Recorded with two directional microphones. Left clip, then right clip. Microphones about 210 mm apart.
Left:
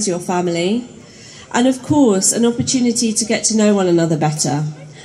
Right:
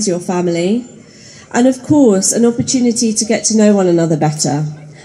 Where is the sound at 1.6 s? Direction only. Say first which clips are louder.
Right 3 dB; 15° right (ahead or behind).